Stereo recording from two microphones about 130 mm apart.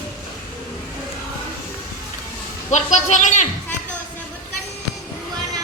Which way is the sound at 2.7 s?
65° left (ahead or behind).